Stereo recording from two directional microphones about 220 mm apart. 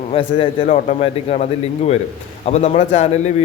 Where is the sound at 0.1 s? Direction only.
25° left (ahead or behind).